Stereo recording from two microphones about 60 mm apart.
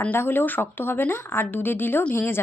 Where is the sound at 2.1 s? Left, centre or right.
Left.